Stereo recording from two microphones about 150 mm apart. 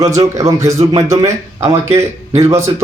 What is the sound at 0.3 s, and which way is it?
Speech, 20° right (ahead or behind).